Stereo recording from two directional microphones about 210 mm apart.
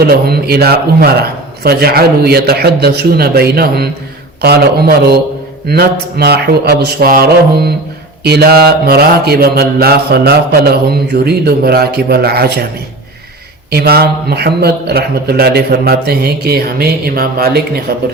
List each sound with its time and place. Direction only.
0.1 s mantra: 50° right (ahead or behind)
13.7 s mantra: 50° right (ahead or behind)